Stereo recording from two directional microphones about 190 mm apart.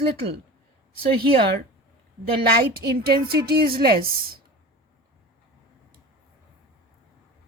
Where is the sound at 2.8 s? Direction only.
55° right (ahead or behind).